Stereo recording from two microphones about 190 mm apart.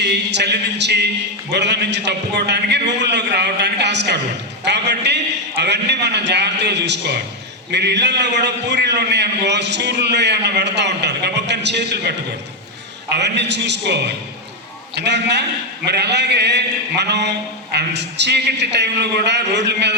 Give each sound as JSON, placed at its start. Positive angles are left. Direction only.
{"t": 0.0, "sound": "a man's voice", "side_deg": -65}
{"t": 13.1, "sound": "a man's voice", "side_deg": -65}